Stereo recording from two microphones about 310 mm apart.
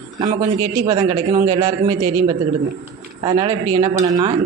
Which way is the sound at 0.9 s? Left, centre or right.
Centre.